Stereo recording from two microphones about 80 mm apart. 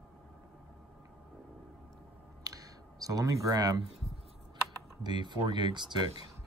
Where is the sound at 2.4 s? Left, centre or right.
Right.